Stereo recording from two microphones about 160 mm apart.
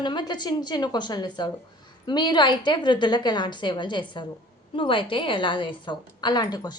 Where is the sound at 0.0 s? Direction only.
30° left (ahead or behind).